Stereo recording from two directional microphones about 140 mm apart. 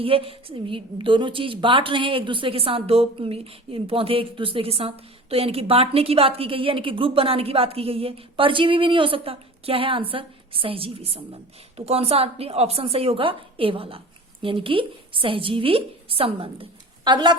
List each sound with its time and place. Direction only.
0.0 s a woman's voice: 40° right (ahead or behind)